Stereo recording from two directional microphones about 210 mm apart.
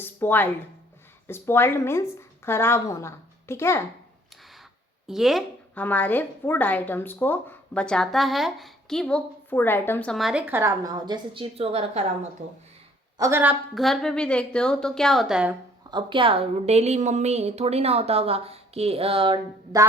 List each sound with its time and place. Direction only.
0.0 s a sound: 10° left (ahead or behind)
1.3 s a woman's voice: 10° left (ahead or behind)
5.0 s a woman's voice: centre (ahead or behind); by 12.0 s 30° right (ahead or behind)
13.1 s a woman's voice: 15° right (ahead or behind)
15.9 s a woman's voice: 20° right (ahead or behind)